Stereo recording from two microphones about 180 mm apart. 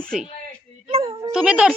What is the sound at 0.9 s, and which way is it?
Speech, 35° right (ahead or behind).